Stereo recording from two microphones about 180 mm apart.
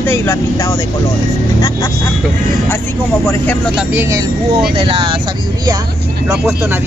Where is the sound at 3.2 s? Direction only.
10° left (ahead or behind).